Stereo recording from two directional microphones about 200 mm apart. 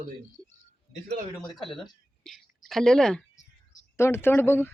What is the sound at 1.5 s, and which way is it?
Speech, centre (ahead or behind).